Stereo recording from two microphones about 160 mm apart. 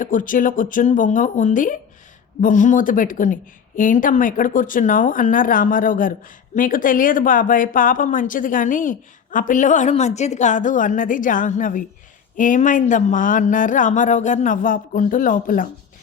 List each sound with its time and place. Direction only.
0.0 s speech: 55° left (ahead or behind)